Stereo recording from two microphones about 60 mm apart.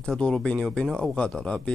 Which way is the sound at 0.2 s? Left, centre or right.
Centre.